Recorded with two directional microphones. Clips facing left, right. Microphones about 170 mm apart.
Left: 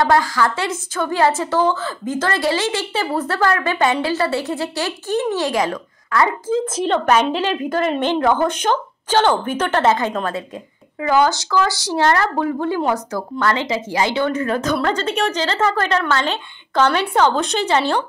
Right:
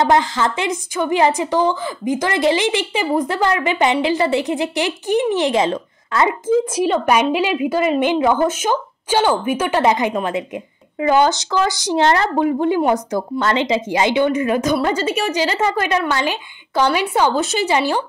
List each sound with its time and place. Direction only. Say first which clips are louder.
0.0 s a woman's voice: right 1 dB; 20° right (ahead or behind)